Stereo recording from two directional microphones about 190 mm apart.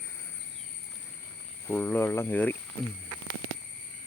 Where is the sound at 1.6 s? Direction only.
10° left (ahead or behind).